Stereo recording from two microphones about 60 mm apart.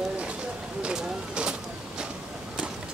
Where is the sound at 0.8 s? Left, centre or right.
Centre.